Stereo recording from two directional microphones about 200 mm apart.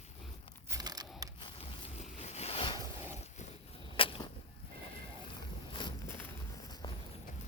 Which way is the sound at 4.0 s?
25° left (ahead or behind).